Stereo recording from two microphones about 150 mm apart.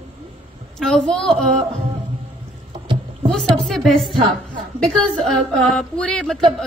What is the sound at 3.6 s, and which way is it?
A woman's voice, centre (ahead or behind).